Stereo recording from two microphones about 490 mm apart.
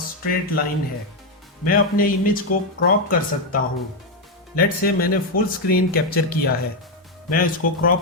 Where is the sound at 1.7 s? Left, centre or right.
Centre.